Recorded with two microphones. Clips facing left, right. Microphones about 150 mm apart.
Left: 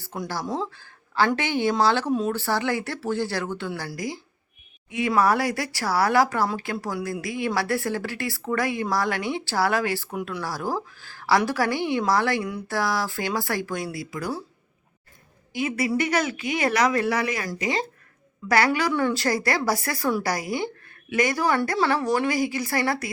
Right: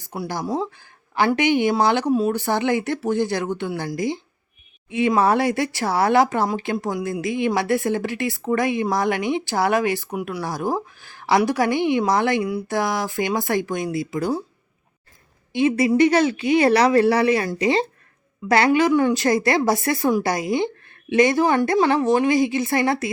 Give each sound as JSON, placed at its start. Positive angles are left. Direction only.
{"t": 0.0, "sound": "speech", "side_deg": -15}
{"t": 15.5, "sound": "speech", "side_deg": -25}